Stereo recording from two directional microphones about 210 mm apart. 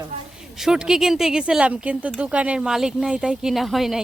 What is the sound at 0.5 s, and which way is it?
Speech, centre (ahead or behind).